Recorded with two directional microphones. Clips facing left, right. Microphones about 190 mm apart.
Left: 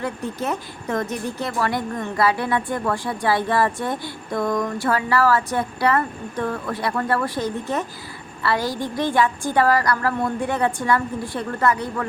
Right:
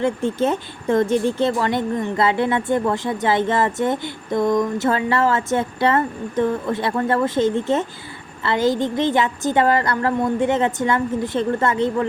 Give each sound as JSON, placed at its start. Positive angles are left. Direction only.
{"t": 0.0, "sound": "speech", "side_deg": -25}